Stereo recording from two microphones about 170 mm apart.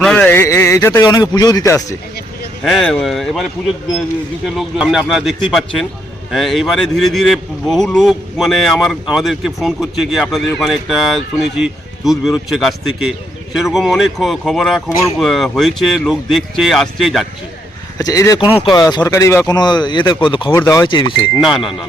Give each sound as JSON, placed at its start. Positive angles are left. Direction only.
{"t": 0.0, "sound": "a sound", "side_deg": 5}
{"t": 1.0, "sound": "speech", "side_deg": 25}
{"t": 2.6, "sound": "speech", "side_deg": 0}
{"t": 4.5, "sound": "speech", "side_deg": -5}
{"t": 17.9, "sound": "speech", "side_deg": 20}
{"t": 20.5, "sound": "speech", "side_deg": 15}
{"t": 21.3, "sound": "speech", "side_deg": 0}